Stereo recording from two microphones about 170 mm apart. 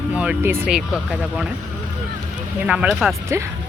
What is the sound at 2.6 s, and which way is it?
Speech, 5° right (ahead or behind).